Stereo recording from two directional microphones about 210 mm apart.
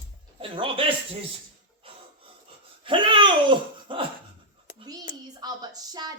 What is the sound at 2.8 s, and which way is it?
A woman's voice, 25° right (ahead or behind).